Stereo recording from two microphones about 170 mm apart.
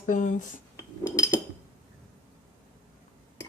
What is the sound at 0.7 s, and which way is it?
Cutlery, 15° left (ahead or behind).